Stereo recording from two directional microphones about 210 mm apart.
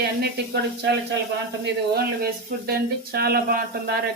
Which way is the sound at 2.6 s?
45° right (ahead or behind).